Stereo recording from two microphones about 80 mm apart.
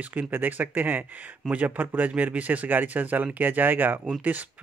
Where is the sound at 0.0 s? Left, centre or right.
Right.